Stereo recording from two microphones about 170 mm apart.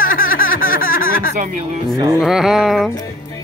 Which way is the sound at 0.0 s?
55° left (ahead or behind).